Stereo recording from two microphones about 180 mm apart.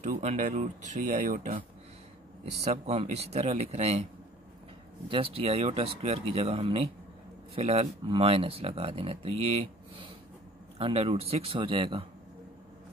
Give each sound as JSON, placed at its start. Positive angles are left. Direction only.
{"t": 0.0, "sound": "speech", "side_deg": -40}
{"t": 2.6, "sound": "speech", "side_deg": -35}
{"t": 5.0, "sound": "speech", "side_deg": -30}